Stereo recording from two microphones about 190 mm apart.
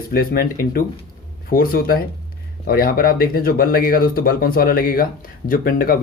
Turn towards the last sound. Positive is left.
turn(degrees=50)  # may be behind; listen again after turning